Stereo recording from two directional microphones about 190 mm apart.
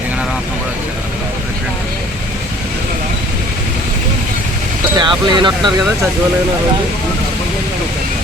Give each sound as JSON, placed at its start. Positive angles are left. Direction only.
{"t": 4.9, "sound": "speech", "side_deg": -25}